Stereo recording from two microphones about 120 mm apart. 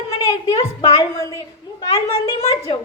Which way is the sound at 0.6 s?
30° left (ahead or behind).